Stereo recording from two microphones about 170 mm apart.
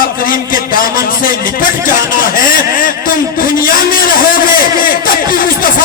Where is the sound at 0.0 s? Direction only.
55° left (ahead or behind).